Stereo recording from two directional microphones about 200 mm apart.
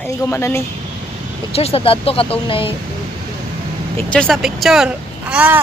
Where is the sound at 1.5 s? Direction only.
30° left (ahead or behind).